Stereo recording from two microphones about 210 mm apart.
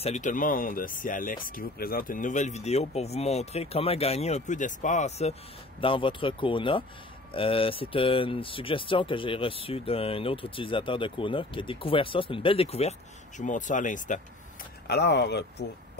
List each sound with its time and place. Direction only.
0.0 s speech: 35° left (ahead or behind)
14.9 s speech: 55° left (ahead or behind)